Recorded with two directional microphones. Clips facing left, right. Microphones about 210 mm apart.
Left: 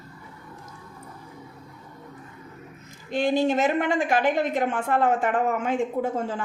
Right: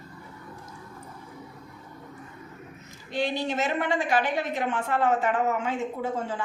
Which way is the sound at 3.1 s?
50° left (ahead or behind).